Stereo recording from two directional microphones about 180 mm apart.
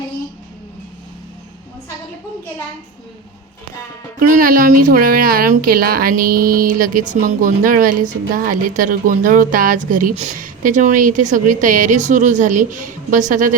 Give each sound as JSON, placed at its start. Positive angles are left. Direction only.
{"t": 4.2, "sound": "speech", "side_deg": -50}